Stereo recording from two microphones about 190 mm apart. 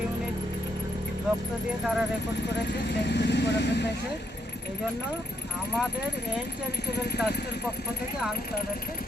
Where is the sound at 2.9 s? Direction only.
65° left (ahead or behind).